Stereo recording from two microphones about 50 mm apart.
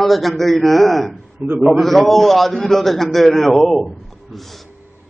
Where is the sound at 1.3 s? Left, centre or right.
Right.